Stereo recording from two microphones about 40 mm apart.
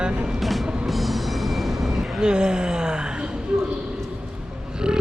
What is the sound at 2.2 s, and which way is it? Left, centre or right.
Speech, centre.